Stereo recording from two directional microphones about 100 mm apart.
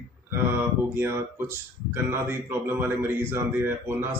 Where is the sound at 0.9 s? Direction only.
25° right (ahead or behind).